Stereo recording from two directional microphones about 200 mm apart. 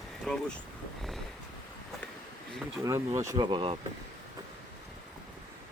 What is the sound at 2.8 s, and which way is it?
Speech, 15° right (ahead or behind).